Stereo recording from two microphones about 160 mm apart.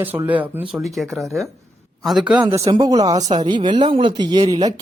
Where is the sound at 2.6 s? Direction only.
25° right (ahead or behind).